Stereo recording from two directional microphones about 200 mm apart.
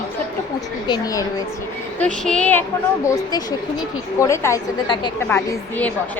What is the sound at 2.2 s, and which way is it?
Speech, 5° left (ahead or behind).